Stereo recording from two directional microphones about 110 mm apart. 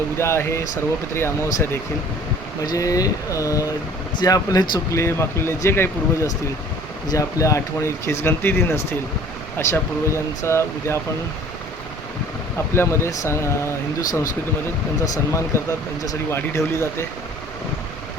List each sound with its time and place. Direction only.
0.2 s speech: 25° left (ahead or behind)
7.1 s speech: 30° left (ahead or behind)
12.7 s speech: 25° left (ahead or behind)